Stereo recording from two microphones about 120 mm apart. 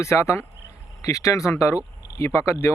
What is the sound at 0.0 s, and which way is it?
Speech, 25° left (ahead or behind).